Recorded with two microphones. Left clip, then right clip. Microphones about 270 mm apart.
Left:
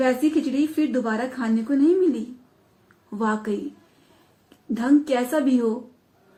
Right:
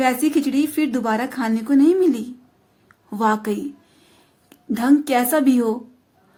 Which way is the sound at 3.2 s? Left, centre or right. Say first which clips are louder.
Right 6 dB; right.